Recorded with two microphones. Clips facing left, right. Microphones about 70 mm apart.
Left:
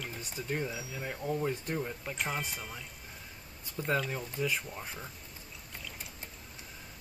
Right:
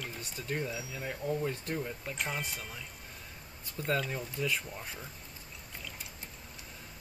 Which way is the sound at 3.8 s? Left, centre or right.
Centre.